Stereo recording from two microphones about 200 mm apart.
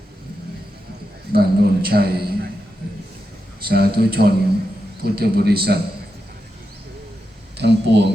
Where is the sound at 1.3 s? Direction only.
50° right (ahead or behind).